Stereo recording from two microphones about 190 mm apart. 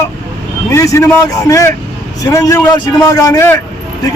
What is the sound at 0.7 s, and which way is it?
A man's voice, 15° left (ahead or behind).